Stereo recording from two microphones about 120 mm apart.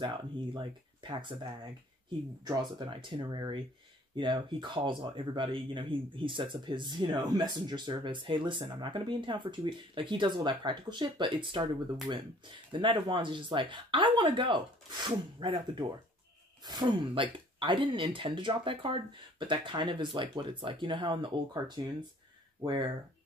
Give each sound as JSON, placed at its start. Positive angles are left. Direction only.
{"t": 0.0, "sound": "speech", "side_deg": -40}
{"t": 12.7, "sound": "speech", "side_deg": -40}